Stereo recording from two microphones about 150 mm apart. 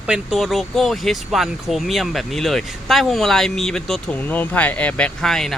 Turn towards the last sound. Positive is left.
turn(degrees=5)  # may be behind; listen again after turning